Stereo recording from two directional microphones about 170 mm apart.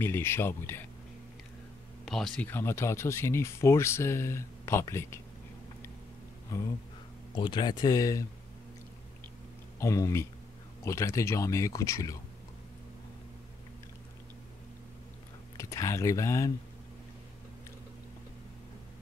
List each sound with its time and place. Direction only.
0.0 s speech: 15° left (ahead or behind)
2.0 s speech: centre (ahead or behind)
7.3 s speech: 25° left (ahead or behind)
9.8 s speech: 20° left (ahead or behind)
15.5 s speech: 20° left (ahead or behind)